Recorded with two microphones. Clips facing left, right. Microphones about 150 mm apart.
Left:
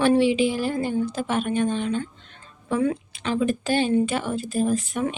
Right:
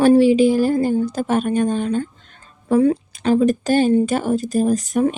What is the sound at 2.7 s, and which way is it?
Speech, 35° right (ahead or behind).